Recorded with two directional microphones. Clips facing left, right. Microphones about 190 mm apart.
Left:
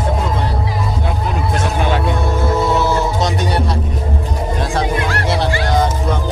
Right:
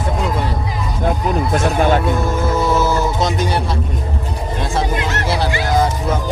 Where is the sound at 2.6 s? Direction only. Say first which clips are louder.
Right 1 dB; centre (ahead or behind).